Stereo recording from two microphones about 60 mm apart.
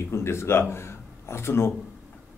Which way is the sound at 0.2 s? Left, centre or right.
Left.